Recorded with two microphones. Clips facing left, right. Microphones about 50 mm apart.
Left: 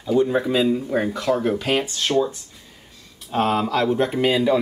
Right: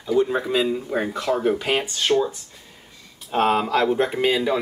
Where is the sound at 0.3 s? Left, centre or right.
Centre.